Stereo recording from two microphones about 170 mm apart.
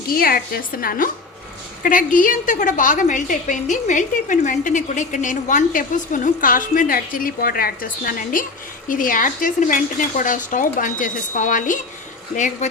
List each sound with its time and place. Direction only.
0.1 s a woman's voice: 60° left (ahead or behind)